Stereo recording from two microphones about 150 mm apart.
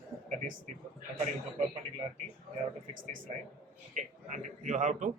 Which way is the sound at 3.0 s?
60° right (ahead or behind).